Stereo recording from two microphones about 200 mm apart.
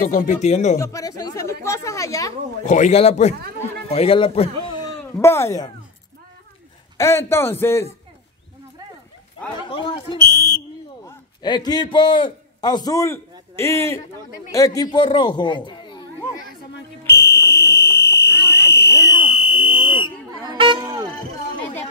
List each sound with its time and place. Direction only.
0.0 s speech: 35° left (ahead or behind)
0.7 s speech: 15° left (ahead or behind)
2.6 s speech: 35° left (ahead or behind)
4.6 s a sound: 20° left (ahead or behind)
7.0 s speech: 15° left (ahead or behind)
9.7 s a man's voice: 25° left (ahead or behind)
17.0 s fire alarm: 10° left (ahead or behind)
19.4 s fire alarm: 90° left
20.4 s a sound: 25° right (ahead or behind)